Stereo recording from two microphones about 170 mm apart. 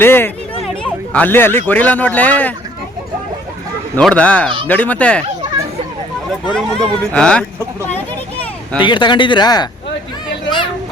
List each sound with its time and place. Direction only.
0.0 s speech: 15° left (ahead or behind)
3.9 s speech: 5° left (ahead or behind)
6.5 s speech: 5° left (ahead or behind)
8.9 s speech: 25° left (ahead or behind)